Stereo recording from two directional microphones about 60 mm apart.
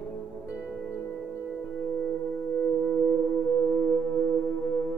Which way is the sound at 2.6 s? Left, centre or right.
Centre.